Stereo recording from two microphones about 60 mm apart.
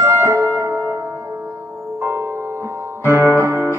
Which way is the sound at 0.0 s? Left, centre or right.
Right.